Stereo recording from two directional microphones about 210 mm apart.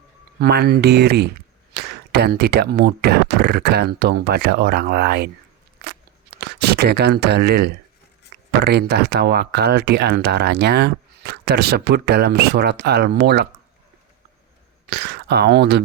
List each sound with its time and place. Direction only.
0.3 s speech: 50° right (ahead or behind)
6.4 s speech: 50° right (ahead or behind)
14.8 s speech: 55° right (ahead or behind)